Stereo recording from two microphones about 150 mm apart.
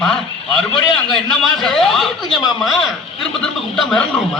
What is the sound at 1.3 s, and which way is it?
A man's voice, centre (ahead or behind).